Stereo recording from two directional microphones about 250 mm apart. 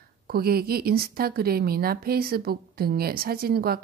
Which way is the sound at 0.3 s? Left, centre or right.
Right.